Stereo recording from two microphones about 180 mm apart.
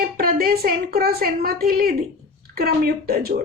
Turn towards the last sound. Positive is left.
turn(degrees=-60)  # may be behind; listen again after turning